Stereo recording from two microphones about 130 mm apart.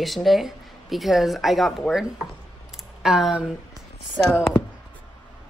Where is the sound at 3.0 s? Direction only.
5° right (ahead or behind).